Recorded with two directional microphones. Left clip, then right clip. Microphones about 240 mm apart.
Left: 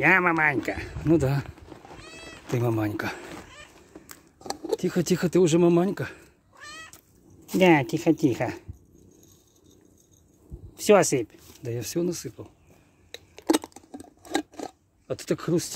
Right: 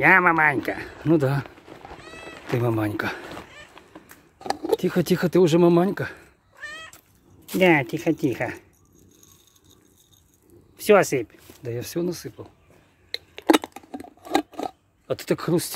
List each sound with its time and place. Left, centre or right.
0.0 s speech: centre
2.0 s cat: centre
2.6 s speech: centre
4.4 s a sound: right
4.7 s bow-wow: centre
7.5 s speech: left
10.8 s speech: centre
13.1 s scissors: right
15.0 s speech: centre